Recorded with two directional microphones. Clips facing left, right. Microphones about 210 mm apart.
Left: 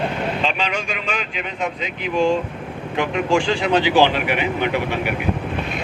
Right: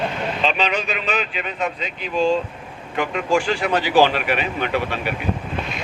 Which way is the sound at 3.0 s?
20° left (ahead or behind).